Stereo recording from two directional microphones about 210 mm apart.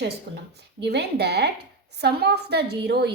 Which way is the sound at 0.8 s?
50° right (ahead or behind).